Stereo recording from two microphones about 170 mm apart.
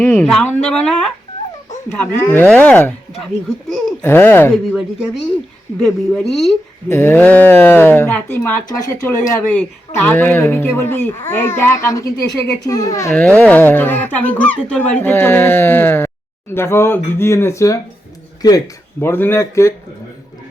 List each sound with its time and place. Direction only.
0.0 s speech: 10° left (ahead or behind)
5.8 s a woman's voice: centre (ahead or behind)
6.8 s speech: 15° left (ahead or behind)
9.5 s speech: 10° left (ahead or behind)
18.9 s speech: 10° left (ahead or behind)